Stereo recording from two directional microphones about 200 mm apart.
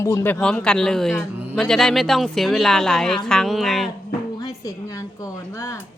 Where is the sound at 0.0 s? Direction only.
15° left (ahead or behind).